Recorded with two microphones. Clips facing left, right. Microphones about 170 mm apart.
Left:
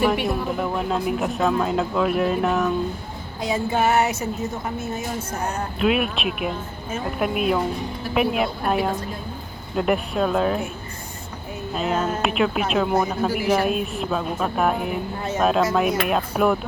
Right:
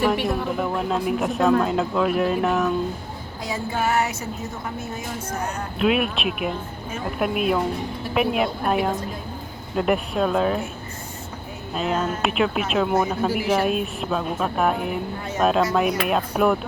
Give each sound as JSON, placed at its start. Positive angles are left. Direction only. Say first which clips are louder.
{"t": 0.0, "sound": "speech", "louder": "even", "side_deg": 0}
{"t": 3.4, "sound": "music", "louder": "left 4 dB", "side_deg": 20}
{"t": 5.8, "sound": "speech", "louder": "even", "side_deg": 0}
{"t": 11.7, "sound": "speech", "louder": "left 1 dB", "side_deg": 0}